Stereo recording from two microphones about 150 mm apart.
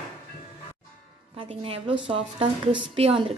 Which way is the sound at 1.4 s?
35° right (ahead or behind).